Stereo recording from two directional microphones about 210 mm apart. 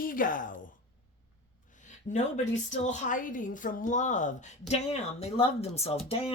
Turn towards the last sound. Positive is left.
turn(degrees=30)  # may be behind; listen again after turning